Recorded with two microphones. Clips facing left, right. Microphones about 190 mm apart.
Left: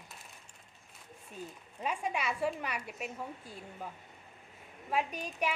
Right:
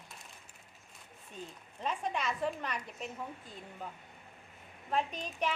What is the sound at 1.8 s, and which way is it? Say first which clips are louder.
Speech: left 1 dB; 10° left (ahead or behind).